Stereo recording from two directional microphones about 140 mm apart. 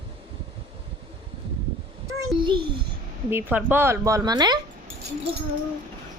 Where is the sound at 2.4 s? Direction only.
35° right (ahead or behind).